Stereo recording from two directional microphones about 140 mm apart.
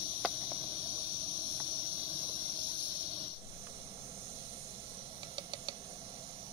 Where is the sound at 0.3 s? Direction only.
40° right (ahead or behind).